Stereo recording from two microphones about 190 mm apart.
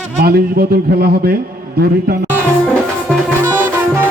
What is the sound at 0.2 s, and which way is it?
A man's voice, 55° right (ahead or behind).